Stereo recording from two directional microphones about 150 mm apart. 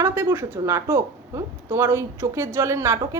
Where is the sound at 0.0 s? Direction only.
15° right (ahead or behind).